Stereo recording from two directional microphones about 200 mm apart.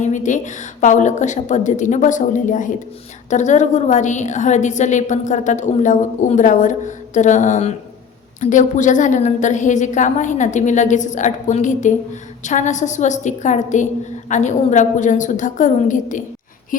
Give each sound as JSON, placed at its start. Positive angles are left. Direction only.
{"t": 0.0, "sound": "a woman's voice", "side_deg": 40}